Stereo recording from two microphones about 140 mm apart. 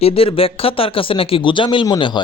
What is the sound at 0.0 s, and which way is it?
Speech, 40° left (ahead or behind).